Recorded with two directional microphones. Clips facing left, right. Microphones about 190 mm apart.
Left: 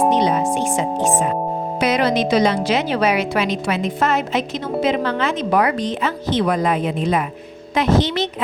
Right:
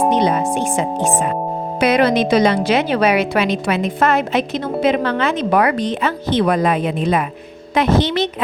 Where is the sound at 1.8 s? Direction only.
60° right (ahead or behind).